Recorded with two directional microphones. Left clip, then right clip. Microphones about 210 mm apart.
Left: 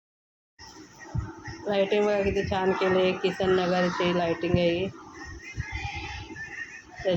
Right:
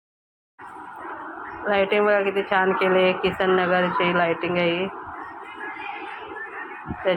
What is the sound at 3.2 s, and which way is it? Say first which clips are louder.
Speech: right 4 dB; 25° right (ahead or behind).